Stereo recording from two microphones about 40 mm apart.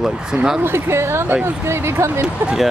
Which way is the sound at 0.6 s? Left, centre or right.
Right.